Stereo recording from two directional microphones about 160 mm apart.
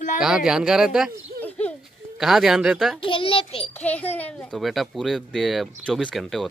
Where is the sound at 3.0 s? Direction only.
35° left (ahead or behind).